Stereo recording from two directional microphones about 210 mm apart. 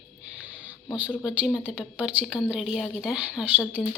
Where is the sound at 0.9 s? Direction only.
5° right (ahead or behind).